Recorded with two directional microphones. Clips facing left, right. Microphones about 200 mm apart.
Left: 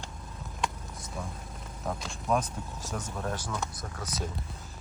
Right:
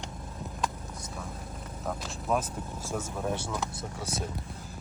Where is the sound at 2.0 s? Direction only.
5° right (ahead or behind).